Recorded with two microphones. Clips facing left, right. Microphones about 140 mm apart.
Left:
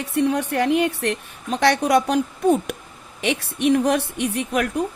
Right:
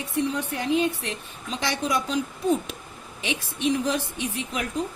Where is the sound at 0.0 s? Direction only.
65° left (ahead or behind).